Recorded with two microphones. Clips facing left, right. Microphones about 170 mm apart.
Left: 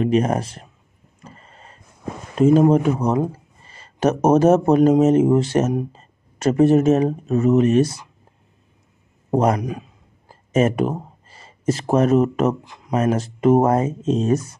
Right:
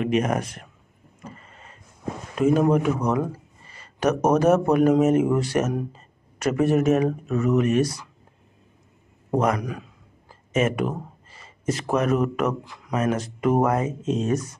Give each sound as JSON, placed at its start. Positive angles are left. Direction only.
{"t": 0.0, "sound": "speech", "side_deg": 30}
{"t": 1.2, "sound": "power windows", "side_deg": 30}
{"t": 2.3, "sound": "speech", "side_deg": 30}
{"t": 9.3, "sound": "a man's voice", "side_deg": 30}
{"t": 9.6, "sound": "a man's voice", "side_deg": 20}
{"t": 10.2, "sound": "speech", "side_deg": 35}